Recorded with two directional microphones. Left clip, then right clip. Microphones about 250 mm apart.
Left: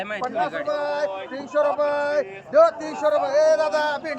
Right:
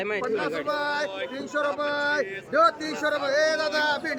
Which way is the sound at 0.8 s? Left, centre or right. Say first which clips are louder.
Left 3 dB; right.